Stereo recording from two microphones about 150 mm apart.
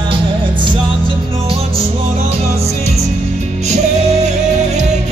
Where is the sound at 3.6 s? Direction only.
50° right (ahead or behind).